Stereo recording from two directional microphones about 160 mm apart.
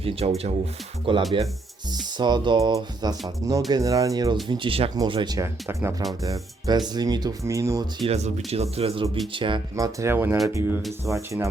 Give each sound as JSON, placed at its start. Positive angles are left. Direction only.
{"t": 0.0, "sound": "speech", "side_deg": -40}
{"t": 8.0, "sound": "speech", "side_deg": -40}
{"t": 9.7, "sound": "speech", "side_deg": -20}